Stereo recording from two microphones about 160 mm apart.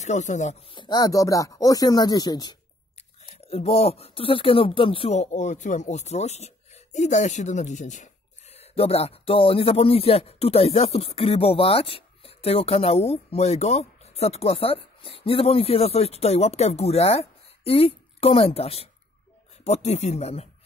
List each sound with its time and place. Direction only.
0.0 s speech: 50° left (ahead or behind)
0.7 s speech: 30° left (ahead or behind)
3.3 s speech: 40° left (ahead or behind)